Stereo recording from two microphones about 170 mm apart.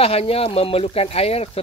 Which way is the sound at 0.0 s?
35° left (ahead or behind).